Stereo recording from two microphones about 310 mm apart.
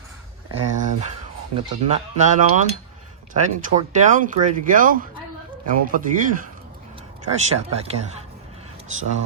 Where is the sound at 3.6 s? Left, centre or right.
Right.